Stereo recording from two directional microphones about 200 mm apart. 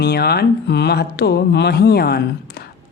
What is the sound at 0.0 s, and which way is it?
Speech, 50° left (ahead or behind).